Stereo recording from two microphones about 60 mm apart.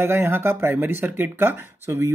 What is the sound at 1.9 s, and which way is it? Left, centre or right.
Speech, right.